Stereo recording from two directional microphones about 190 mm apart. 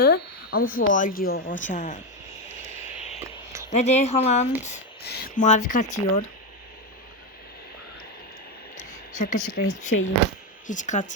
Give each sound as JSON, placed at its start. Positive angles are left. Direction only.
{"t": 0.0, "sound": "speech", "side_deg": 50}
{"t": 3.2, "sound": "a sound", "side_deg": -15}
{"t": 3.7, "sound": "speech", "side_deg": 35}
{"t": 5.0, "sound": "speech", "side_deg": 55}
{"t": 5.4, "sound": "speech", "side_deg": 40}
{"t": 9.1, "sound": "speech", "side_deg": 40}